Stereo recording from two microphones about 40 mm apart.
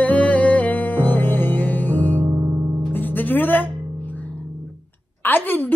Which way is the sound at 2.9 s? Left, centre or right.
Left.